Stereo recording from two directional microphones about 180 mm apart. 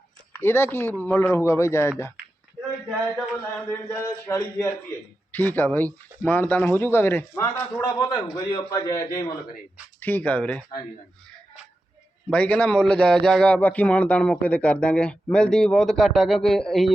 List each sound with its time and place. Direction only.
0.3 s speech: 15° left (ahead or behind)
3.7 s a man's voice: 10° left (ahead or behind)
12.3 s a man's voice: 10° left (ahead or behind)